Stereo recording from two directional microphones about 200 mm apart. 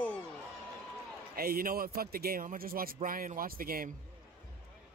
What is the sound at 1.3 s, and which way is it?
A man's voice, 50° right (ahead or behind).